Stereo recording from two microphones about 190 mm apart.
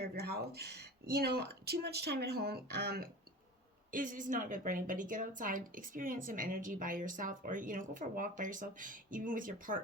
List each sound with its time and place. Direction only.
0.0 s speech: 60° right (ahead or behind)
3.9 s a woman's voice: 45° right (ahead or behind)